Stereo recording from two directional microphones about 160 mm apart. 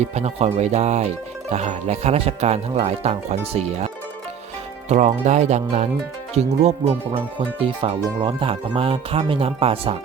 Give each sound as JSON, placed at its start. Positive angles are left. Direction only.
{"t": 0.0, "sound": "speech", "side_deg": -45}
{"t": 4.9, "sound": "speech", "side_deg": -45}